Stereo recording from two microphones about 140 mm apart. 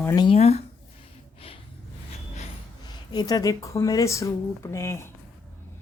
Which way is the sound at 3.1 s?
30° left (ahead or behind).